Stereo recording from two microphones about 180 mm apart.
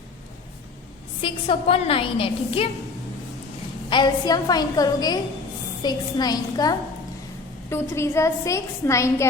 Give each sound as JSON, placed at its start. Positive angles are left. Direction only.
{"t": 1.2, "sound": "a woman's voice", "side_deg": 30}
{"t": 3.8, "sound": "a woman's voice", "side_deg": 25}